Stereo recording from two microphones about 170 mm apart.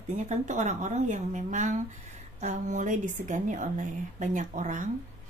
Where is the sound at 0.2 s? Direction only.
45° right (ahead or behind).